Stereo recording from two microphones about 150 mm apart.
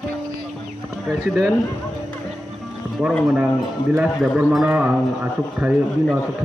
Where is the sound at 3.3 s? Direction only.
Centre (ahead or behind).